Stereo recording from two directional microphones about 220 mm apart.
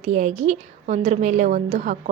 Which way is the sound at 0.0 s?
30° right (ahead or behind).